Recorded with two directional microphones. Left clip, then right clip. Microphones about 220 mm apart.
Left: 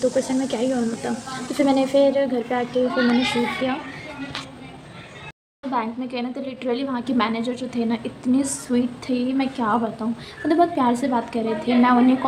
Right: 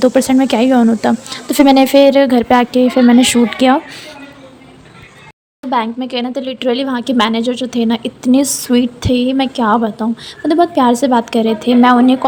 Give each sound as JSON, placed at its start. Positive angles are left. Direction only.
{"t": 0.0, "sound": "speech", "side_deg": -55}
{"t": 5.7, "sound": "a woman's voice", "side_deg": -40}